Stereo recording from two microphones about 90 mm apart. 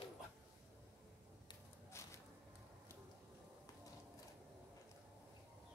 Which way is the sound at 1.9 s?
35° left (ahead or behind).